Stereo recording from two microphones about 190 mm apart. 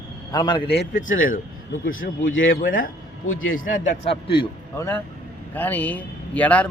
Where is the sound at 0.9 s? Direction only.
45° left (ahead or behind).